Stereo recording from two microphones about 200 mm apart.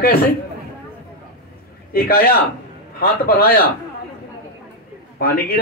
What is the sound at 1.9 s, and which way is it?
A man's voice, 50° left (ahead or behind).